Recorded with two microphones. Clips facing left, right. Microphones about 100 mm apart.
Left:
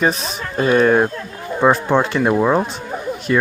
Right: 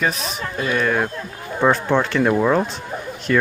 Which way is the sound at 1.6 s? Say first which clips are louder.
Left 2 dB; 15° left (ahead or behind).